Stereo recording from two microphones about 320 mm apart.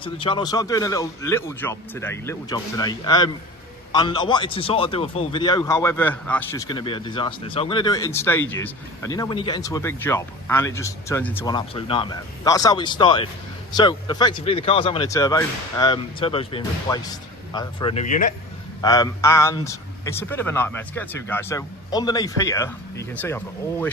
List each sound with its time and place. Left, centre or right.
0.0 s a man's voice: centre
18.8 s a man's voice: centre